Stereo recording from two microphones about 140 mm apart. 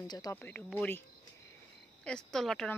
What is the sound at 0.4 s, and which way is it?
Speech, 15° left (ahead or behind).